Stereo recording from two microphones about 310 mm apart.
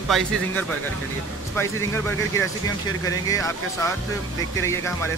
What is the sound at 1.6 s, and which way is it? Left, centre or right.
Speech, centre.